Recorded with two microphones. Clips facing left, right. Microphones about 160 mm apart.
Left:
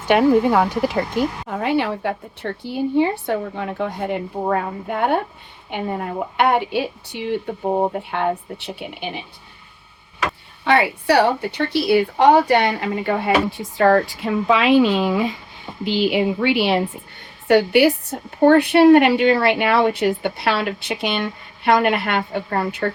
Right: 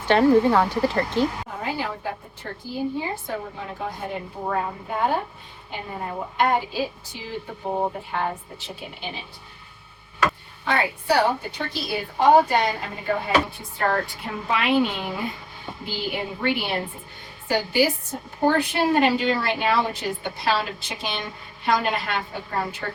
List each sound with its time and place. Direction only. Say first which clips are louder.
0.1 s speech: left 2 dB; 15° left (ahead or behind)
1.5 s a woman's voice: left 8 dB; 70° left (ahead or behind)
10.6 s a woman's voice: left 7 dB; 75° left (ahead or behind)
17.5 s a woman's voice: left 8 dB; 65° left (ahead or behind)